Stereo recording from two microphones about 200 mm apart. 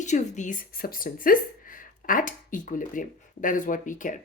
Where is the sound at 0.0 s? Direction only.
35° left (ahead or behind).